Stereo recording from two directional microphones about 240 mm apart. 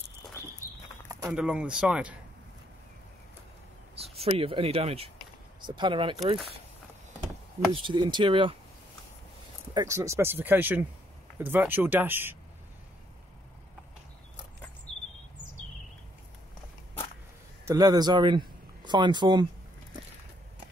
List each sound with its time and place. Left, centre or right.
1.2 s speech: centre
3.9 s speech: right
7.7 s speech: centre
9.8 s speech: centre
17.6 s speech: centre